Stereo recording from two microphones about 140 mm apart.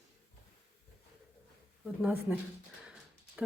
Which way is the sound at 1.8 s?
5° right (ahead or behind).